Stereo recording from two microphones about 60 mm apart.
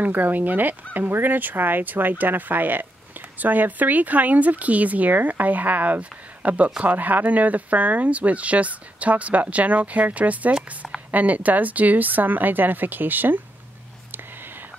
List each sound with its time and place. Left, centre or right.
0.0 s a woman's voice: right